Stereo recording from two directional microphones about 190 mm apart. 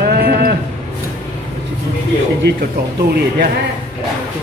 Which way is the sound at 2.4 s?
60° right (ahead or behind).